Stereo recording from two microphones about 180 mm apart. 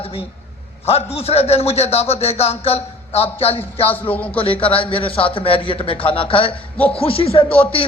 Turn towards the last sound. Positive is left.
turn(degrees=30)  # may be behind; listen again after turning